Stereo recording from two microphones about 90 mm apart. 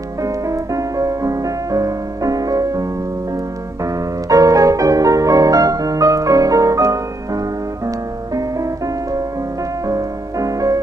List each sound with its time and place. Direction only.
0.2 s music: 40° right (ahead or behind)